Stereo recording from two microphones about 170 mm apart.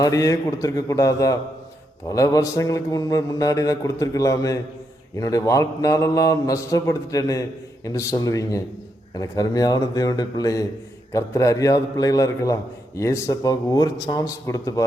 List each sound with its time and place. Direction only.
0.0 s mantra: 20° left (ahead or behind)